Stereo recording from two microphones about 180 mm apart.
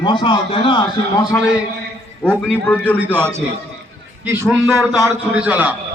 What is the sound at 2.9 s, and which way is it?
A man's voice, 10° right (ahead or behind).